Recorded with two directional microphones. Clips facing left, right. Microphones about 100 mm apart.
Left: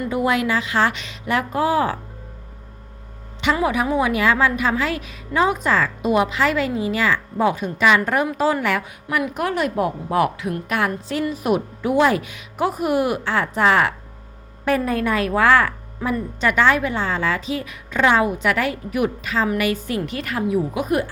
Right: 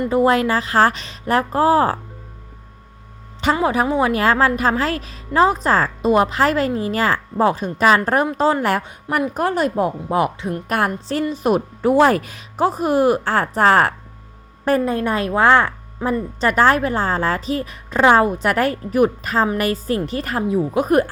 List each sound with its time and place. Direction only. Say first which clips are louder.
0.0 s speech: right 5 dB; 35° right (ahead or behind)
3.4 s speech: right 2 dB; 35° right (ahead or behind)
10.7 s speech: right 3 dB; 40° right (ahead or behind)
14.8 s a woman's voice: right 1 dB; 25° right (ahead or behind); by 21.1 s 45° right (ahead or behind)